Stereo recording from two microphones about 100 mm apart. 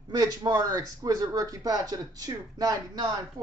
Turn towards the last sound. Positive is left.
turn(degrees=-40)  # may be behind; listen again after turning